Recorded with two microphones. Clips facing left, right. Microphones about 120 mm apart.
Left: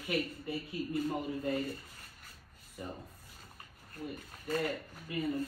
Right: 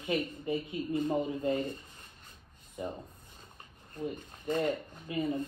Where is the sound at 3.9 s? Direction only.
25° right (ahead or behind).